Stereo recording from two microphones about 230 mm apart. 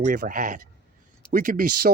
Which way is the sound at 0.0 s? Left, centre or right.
Right.